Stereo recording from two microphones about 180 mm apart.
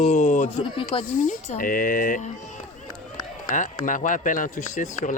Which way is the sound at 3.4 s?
45° left (ahead or behind).